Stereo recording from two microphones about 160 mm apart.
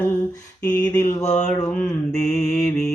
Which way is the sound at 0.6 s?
25° left (ahead or behind).